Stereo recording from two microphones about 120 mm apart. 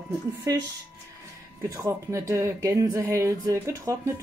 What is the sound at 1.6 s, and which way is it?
Speech, 25° right (ahead or behind).